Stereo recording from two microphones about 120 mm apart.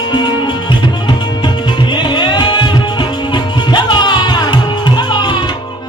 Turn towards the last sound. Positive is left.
turn(degrees=40)  # may be behind; listen again after turning